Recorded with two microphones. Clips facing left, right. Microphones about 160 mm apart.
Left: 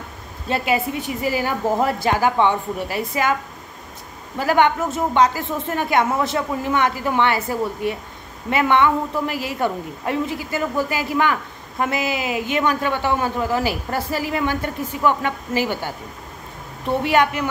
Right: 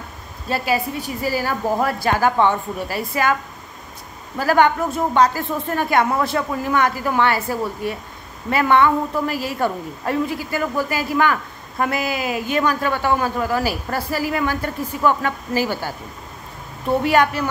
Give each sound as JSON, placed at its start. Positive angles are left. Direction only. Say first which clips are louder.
{"t": 0.5, "sound": "a man's voice", "louder": "even", "side_deg": 20}
{"t": 4.4, "sound": "a man's voice", "louder": "right 1 dB", "side_deg": 20}
{"t": 17.0, "sound": "a woman's voice", "louder": "right 1 dB", "side_deg": 20}